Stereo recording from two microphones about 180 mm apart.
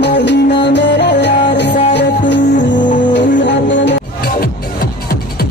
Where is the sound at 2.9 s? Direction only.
45° left (ahead or behind).